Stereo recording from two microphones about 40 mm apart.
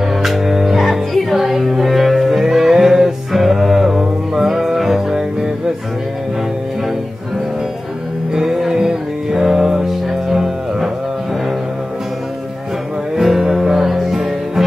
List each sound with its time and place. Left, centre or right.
0.2 s music: centre
8.3 s music: centre
13.1 s music: centre